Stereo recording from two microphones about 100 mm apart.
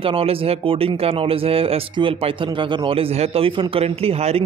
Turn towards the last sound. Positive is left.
turn(degrees=-90)